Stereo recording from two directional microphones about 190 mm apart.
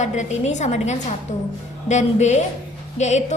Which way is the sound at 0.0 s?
35° left (ahead or behind).